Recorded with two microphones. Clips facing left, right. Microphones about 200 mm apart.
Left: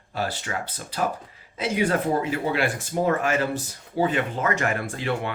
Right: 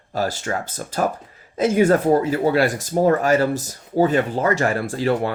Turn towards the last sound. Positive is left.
turn(degrees=-40)  # may be behind; listen again after turning